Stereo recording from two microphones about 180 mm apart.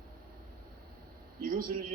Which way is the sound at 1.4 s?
55° right (ahead or behind).